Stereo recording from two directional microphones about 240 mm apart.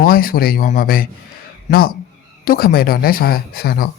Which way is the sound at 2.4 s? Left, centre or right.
Left.